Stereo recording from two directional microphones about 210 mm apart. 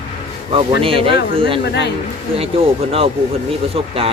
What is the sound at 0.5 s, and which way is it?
Speech, 25° right (ahead or behind).